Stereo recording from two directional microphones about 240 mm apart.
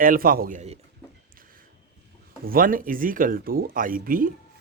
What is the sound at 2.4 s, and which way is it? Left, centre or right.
Speech, right.